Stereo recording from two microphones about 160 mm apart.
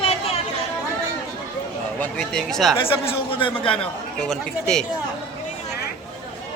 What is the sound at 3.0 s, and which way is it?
Speech, 35° left (ahead or behind).